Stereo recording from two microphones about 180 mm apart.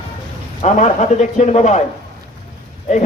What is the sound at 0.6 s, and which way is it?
A man's voice, 40° left (ahead or behind).